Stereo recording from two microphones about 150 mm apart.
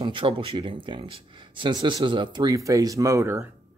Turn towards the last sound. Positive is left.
turn(degrees=-20)  # may be behind; listen again after turning